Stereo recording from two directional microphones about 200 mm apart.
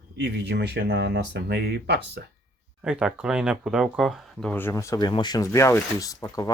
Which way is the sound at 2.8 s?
5° right (ahead or behind).